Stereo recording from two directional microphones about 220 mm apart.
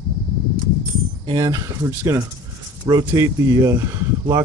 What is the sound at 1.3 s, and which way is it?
Speech, 15° right (ahead or behind).